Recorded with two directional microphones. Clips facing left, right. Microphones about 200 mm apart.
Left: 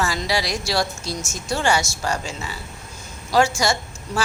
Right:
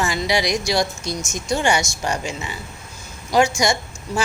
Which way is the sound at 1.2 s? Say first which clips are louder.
Right 3 dB; 5° left (ahead or behind).